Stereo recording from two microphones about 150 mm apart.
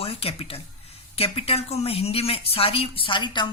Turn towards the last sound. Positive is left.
turn(degrees=30)  # may be behind; listen again after turning